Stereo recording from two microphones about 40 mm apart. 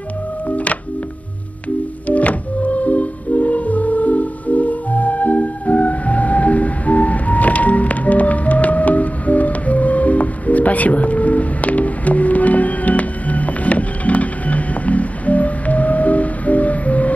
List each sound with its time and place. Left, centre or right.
0.5 s music: left
2.0 s music: left